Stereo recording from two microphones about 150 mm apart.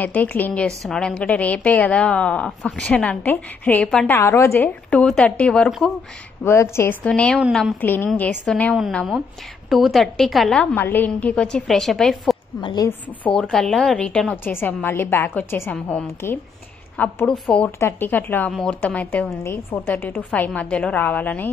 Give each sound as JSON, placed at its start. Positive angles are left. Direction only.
{"t": 0.0, "sound": "a woman's voice", "side_deg": 10}
{"t": 4.2, "sound": "a woman's voice", "side_deg": 20}
{"t": 4.9, "sound": "speech", "side_deg": 5}
{"t": 6.4, "sound": "a woman's voice", "side_deg": 15}
{"t": 8.7, "sound": "speech", "side_deg": 0}
{"t": 10.6, "sound": "a woman's voice", "side_deg": 10}
{"t": 12.5, "sound": "a woman's voice", "side_deg": 25}
{"t": 13.2, "sound": "a woman's voice", "side_deg": 5}